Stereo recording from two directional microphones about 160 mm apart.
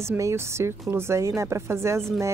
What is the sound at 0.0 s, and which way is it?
Speech, 15° right (ahead or behind).